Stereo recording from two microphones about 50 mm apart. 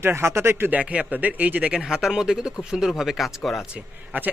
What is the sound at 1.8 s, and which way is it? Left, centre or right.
Speech, centre.